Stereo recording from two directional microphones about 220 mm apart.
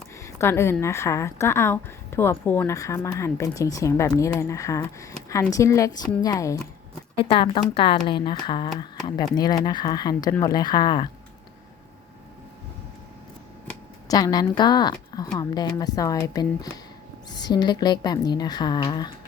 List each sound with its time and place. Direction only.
0.2 s a woman's voice: 10° left (ahead or behind)
14.1 s a woman's voice: 15° left (ahead or behind)